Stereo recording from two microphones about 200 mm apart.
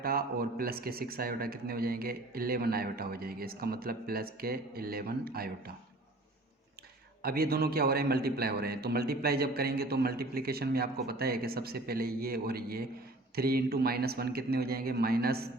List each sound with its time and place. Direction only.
0.0 s a man's voice: 45° right (ahead or behind)
7.2 s a man's voice: 50° right (ahead or behind)